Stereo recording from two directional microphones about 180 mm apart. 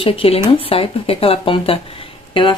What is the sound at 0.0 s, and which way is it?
Speech, 30° left (ahead or behind).